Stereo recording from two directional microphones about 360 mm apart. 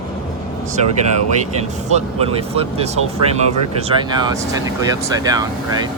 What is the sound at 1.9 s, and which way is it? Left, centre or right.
Speech, centre.